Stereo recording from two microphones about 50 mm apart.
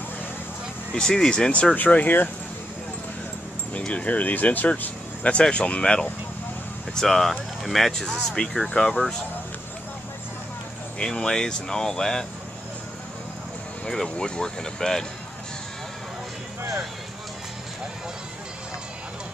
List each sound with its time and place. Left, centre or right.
0.9 s speech: centre
1.9 s speech: left
3.8 s speech: left
7.0 s speech: centre
11.0 s speech: centre
13.8 s speech: centre